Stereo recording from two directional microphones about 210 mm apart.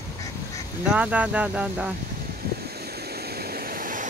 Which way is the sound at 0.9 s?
5° right (ahead or behind).